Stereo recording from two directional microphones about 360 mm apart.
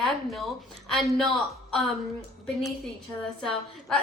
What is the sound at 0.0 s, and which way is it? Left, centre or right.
A woman's voice, centre.